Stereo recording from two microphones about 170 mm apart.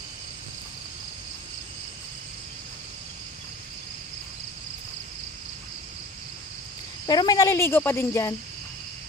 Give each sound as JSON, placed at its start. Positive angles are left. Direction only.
{"t": 7.1, "sound": "speech", "side_deg": 25}